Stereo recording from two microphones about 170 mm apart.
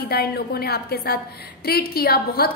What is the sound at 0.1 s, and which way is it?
A woman's voice, 65° left (ahead or behind).